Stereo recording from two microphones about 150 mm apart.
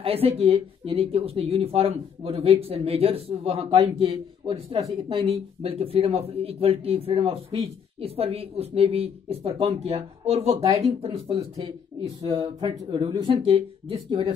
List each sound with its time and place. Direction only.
0.0 s speech: 40° right (ahead or behind)